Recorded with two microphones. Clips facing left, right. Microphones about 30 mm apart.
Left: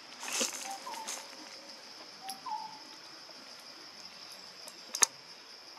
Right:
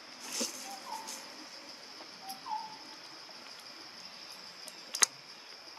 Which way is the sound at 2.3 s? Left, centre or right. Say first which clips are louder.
Left 1 dB; left.